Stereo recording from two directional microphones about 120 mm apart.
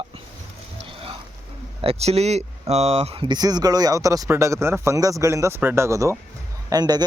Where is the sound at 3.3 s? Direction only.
35° right (ahead or behind).